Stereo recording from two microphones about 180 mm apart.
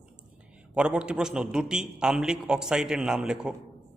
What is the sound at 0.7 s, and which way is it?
A man's voice, 5° right (ahead or behind).